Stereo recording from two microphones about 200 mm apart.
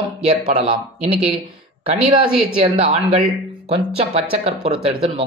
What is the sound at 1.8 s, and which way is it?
Speech, 25° right (ahead or behind).